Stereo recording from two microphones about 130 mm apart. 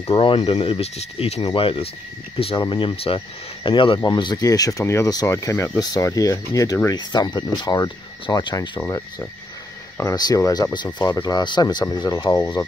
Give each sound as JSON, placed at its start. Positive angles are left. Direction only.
{"t": 0.0, "sound": "speech", "side_deg": 45}